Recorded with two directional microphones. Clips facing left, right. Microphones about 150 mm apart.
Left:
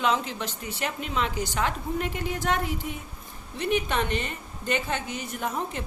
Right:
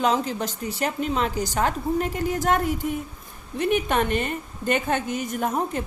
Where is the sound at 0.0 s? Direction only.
40° right (ahead or behind).